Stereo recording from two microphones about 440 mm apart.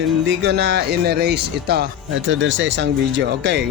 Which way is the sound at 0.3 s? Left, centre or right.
Right.